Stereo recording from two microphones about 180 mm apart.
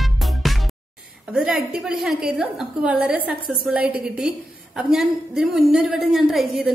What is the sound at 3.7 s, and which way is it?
A woman's voice, 5° right (ahead or behind).